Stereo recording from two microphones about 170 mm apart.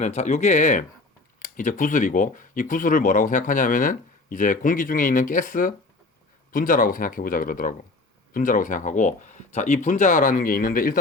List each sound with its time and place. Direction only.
0.0 s speech: 45° left (ahead or behind)